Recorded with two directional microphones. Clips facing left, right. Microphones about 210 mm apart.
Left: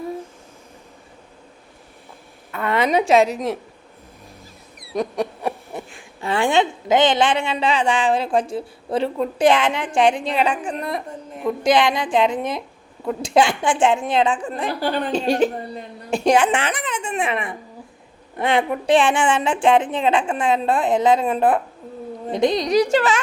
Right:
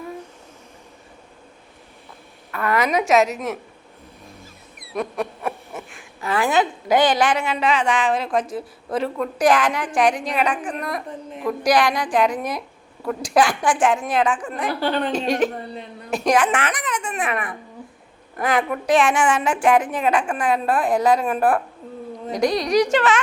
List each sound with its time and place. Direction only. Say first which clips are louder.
2.5 s a woman's voice: left 1 dB; 25° left (ahead or behind)
4.4 s a sound: even; 35° left (ahead or behind)
11.6 s a woman's voice: left 1 dB; 25° left (ahead or behind); by 15.1 s 40° left (ahead or behind)
15.3 s a woman's voice: left 2 dB; 30° left (ahead or behind)